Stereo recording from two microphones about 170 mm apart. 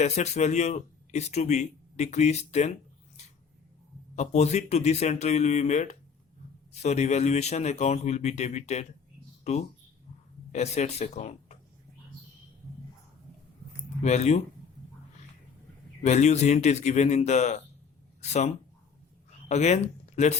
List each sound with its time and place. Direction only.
0.0 s speech: 40° left (ahead or behind)
4.1 s speech: 40° left (ahead or behind)
14.0 s speech: 40° left (ahead or behind)
16.0 s speech: 40° left (ahead or behind)